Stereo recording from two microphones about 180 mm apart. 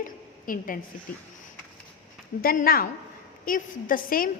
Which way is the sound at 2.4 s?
55° left (ahead or behind).